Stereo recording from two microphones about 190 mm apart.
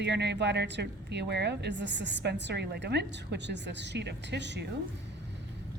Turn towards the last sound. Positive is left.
turn(degrees=-65)  # may be behind; listen again after turning